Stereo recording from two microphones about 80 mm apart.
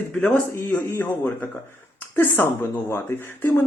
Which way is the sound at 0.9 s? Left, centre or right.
Left.